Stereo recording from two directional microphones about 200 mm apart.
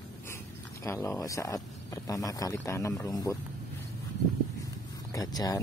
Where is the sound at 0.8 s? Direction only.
15° left (ahead or behind).